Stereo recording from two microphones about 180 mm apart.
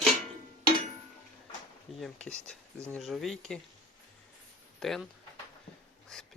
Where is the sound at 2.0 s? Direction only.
5° left (ahead or behind).